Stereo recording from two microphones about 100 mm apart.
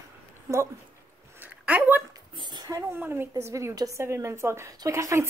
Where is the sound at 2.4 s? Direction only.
45° right (ahead or behind).